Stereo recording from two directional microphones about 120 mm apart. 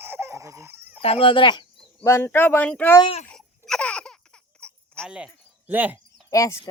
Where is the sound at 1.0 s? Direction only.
50° left (ahead or behind).